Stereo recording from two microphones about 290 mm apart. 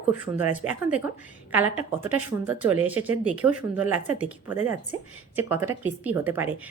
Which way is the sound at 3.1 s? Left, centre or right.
Right.